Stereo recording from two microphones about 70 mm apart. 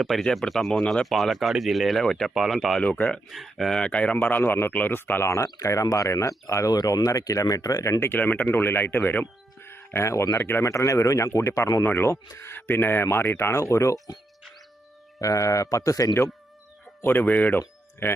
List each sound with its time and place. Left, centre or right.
0.0 s speech: centre
2.8 s speech: left
3.2 s speech: centre
3.8 s speech: centre
5.4 s speech: left
6.7 s speech: left
7.9 s speech: left
8.2 s speech: left
9.6 s music: left
10.3 s speech: left
15.2 s speech: left
17.0 s speech: left
18.0 s speech: left